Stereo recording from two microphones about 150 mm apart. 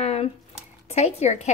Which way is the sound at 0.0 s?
45° left (ahead or behind).